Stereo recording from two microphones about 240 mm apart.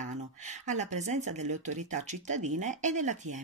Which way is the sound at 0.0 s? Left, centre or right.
Right.